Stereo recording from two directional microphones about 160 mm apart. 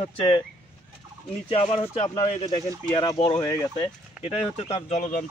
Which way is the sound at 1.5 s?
40° left (ahead or behind).